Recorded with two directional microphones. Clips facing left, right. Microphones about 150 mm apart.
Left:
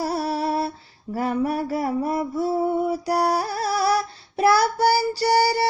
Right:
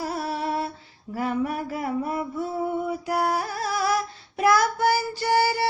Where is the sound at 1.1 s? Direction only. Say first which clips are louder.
Left 3 dB; 40° left (ahead or behind).